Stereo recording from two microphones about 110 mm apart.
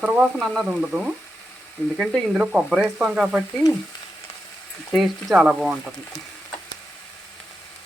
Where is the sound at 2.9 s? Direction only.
20° right (ahead or behind).